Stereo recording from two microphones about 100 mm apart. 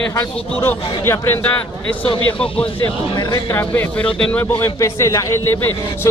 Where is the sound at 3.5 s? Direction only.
20° left (ahead or behind).